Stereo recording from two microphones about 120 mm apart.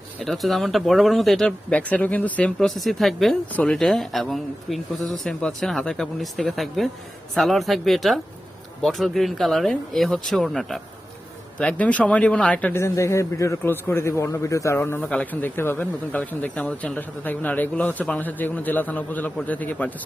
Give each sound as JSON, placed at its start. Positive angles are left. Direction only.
{"t": 0.2, "sound": "speech", "side_deg": 0}
{"t": 15.0, "sound": "speech", "side_deg": 10}